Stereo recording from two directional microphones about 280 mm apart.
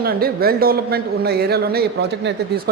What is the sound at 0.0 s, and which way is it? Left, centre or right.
A man's voice, right.